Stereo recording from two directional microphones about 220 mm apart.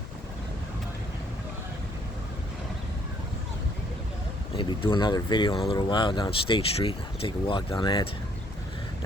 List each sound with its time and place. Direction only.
4.5 s speech: 25° left (ahead or behind)